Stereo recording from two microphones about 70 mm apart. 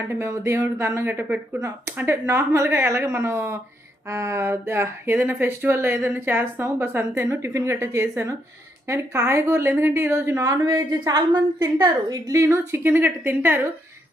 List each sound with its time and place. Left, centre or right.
0.1 s a woman's voice: right
10.8 s a woman's voice: right
12.3 s a woman's voice: right